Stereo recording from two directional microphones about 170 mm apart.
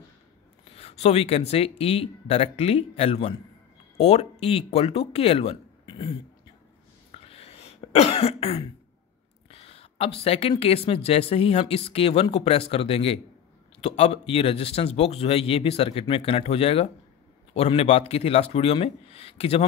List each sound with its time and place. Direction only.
0.7 s speech: 40° left (ahead or behind)
7.1 s cough: 35° left (ahead or behind)
9.5 s speech: 35° left (ahead or behind)